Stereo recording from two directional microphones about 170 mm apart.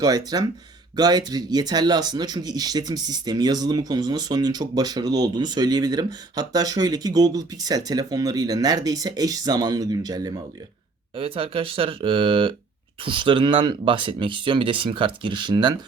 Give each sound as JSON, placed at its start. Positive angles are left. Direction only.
{"t": 0.0, "sound": "speech", "side_deg": -20}